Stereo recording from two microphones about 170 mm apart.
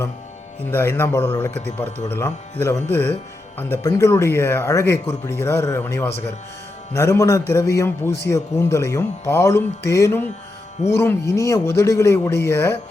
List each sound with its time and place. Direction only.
0.7 s a man's voice: 15° left (ahead or behind)